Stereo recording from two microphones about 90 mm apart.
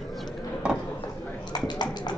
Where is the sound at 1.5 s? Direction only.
50° left (ahead or behind).